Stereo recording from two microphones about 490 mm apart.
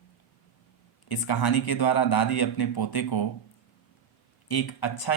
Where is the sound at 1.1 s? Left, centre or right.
Left.